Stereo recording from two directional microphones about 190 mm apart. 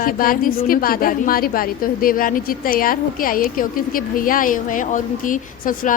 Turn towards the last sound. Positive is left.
turn(degrees=45)  # may be behind; listen again after turning